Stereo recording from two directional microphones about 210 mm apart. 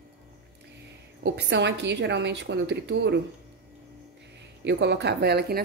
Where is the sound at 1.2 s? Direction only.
55° right (ahead or behind).